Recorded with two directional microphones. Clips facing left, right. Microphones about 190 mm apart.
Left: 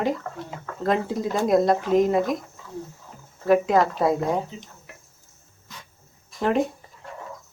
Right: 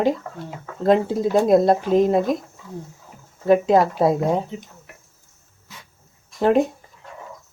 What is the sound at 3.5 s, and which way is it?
Speech, 25° right (ahead or behind).